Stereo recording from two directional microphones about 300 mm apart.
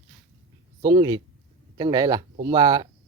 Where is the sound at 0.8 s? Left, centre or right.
Centre.